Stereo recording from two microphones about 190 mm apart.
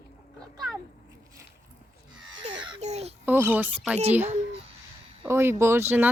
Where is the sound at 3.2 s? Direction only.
10° right (ahead or behind).